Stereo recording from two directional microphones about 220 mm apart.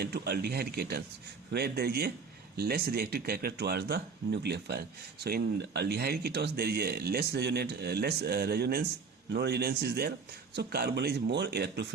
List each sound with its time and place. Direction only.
0.0 s speech: 45° right (ahead or behind)